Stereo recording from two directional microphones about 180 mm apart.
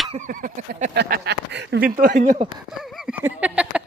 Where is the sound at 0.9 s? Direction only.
70° right (ahead or behind); by 2.5 s 40° right (ahead or behind).